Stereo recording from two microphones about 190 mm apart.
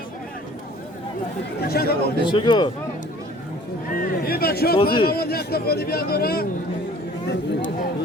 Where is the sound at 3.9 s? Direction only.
50° left (ahead or behind).